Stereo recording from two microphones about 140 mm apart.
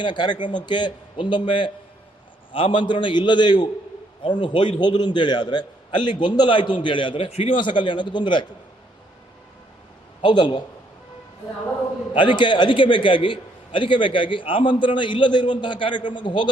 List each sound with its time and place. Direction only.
0.0 s a man's voice: 35° left (ahead or behind)
10.2 s a man's voice: 35° left (ahead or behind)
12.1 s a man's voice: 35° left (ahead or behind)